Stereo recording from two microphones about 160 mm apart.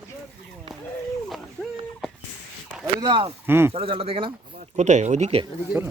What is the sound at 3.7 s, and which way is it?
Speech, 35° right (ahead or behind).